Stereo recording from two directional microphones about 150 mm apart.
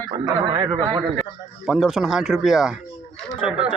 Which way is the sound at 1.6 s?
Centre (ahead or behind).